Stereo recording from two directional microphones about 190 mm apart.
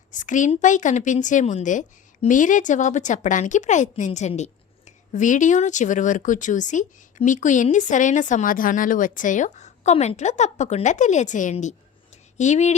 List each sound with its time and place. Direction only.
0.1 s a woman's voice: 40° left (ahead or behind)